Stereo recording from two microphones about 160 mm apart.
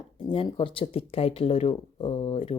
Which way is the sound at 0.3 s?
30° left (ahead or behind).